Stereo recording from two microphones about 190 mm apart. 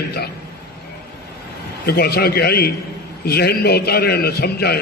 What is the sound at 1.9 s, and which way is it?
A man's voice, 55° left (ahead or behind).